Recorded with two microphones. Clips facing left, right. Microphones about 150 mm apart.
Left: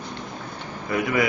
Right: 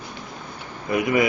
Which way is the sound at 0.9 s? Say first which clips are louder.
Right 3 dB; 20° right (ahead or behind).